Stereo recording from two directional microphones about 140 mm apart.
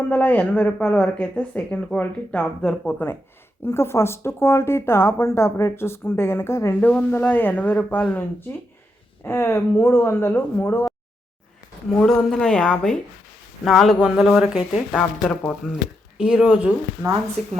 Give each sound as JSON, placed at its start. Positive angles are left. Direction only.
{"t": 0.1, "sound": "speech", "side_deg": 10}
{"t": 11.9, "sound": "speech", "side_deg": 5}
{"t": 17.4, "sound": "speech", "side_deg": 5}